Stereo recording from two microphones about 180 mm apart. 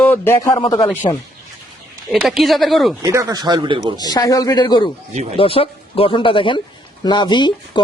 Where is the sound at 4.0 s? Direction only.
20° left (ahead or behind).